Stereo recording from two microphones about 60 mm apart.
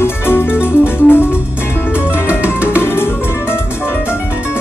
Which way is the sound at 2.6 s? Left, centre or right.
Left.